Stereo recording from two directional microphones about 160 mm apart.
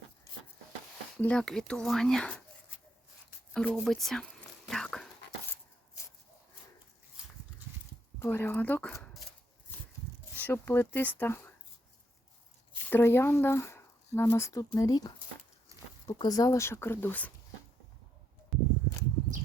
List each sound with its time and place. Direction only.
1.2 s speech: 5° left (ahead or behind)
4.7 s dog: 5° left (ahead or behind)
8.2 s speech: 15° left (ahead or behind)
10.3 s speech: 10° left (ahead or behind)
12.9 s speech: 15° left (ahead or behind)
15.7 s a sound: 20° right (ahead or behind)
16.0 s speech: 25° left (ahead or behind); by 17.3 s 10° left (ahead or behind)